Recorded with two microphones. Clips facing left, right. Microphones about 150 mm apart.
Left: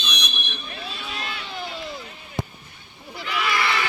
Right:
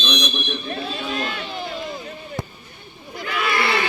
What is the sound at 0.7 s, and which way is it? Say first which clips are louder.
Speech: right 7 dB; 50° right (ahead or behind).